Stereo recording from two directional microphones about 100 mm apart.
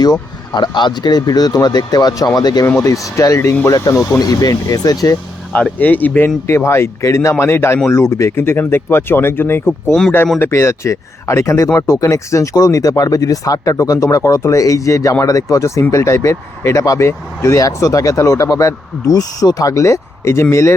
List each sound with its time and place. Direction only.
0.0 s speech: 45° left (ahead or behind)
2.6 s speech: 30° left (ahead or behind)
5.5 s speech: 15° left (ahead or behind)